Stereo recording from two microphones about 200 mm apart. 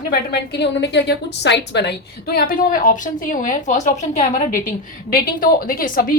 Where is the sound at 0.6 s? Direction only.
60° left (ahead or behind).